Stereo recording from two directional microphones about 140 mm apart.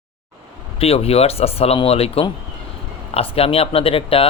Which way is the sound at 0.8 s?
45° left (ahead or behind).